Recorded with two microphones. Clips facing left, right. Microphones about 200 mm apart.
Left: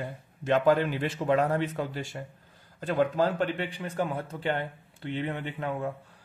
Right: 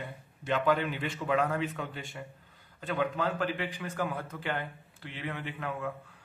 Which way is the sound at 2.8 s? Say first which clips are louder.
Left 6 dB; 40° left (ahead or behind).